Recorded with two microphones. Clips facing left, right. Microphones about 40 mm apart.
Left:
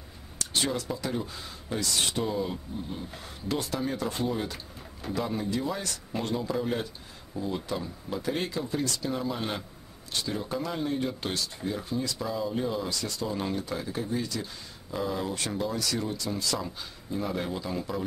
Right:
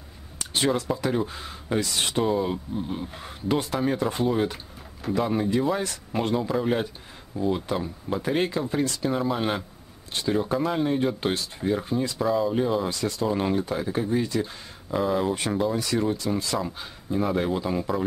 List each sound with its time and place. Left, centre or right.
0.4 s a sound: right
1.0 s speech: right
12.2 s speech: centre